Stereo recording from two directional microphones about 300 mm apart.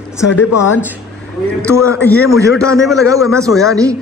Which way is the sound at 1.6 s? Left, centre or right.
Centre.